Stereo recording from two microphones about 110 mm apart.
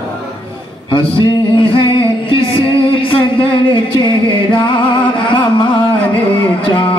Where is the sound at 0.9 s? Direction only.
50° left (ahead or behind).